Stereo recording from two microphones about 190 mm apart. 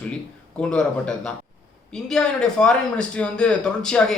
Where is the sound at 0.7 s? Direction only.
5° left (ahead or behind).